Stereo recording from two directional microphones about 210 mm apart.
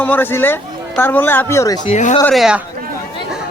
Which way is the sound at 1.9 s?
35° left (ahead or behind).